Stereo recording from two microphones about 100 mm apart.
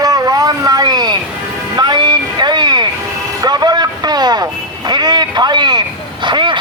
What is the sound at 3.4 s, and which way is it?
Vehicle, 45° right (ahead or behind).